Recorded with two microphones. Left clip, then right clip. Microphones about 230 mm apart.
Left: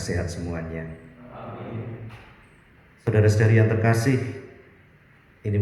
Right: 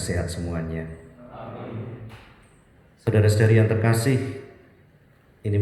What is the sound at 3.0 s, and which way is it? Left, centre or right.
Speech, right.